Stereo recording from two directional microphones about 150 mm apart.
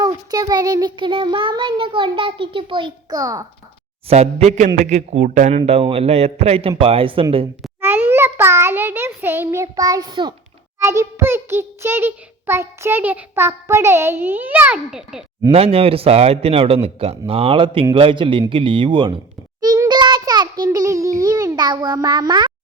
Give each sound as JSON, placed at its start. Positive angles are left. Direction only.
{"t": 0.0, "sound": "child singing", "side_deg": -25}
{"t": 4.1, "sound": "a man's voice", "side_deg": -45}
{"t": 7.8, "sound": "child singing", "side_deg": -15}
{"t": 10.8, "sound": "a child's voice", "side_deg": -20}
{"t": 15.5, "sound": "child singing", "side_deg": -40}
{"t": 19.6, "sound": "a child's voice", "side_deg": -25}